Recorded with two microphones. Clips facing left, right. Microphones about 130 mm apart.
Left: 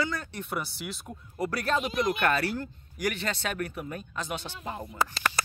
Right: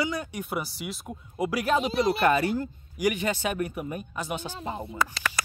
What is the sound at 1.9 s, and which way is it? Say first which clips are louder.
Speech: right 3 dB; 30° right (ahead or behind).